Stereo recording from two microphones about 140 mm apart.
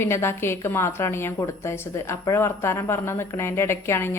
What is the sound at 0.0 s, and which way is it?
A woman's voice, 20° left (ahead or behind).